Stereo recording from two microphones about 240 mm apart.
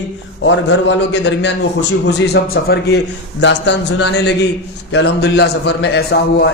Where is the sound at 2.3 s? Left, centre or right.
Left.